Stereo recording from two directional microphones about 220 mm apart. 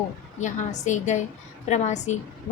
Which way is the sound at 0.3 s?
35° left (ahead or behind).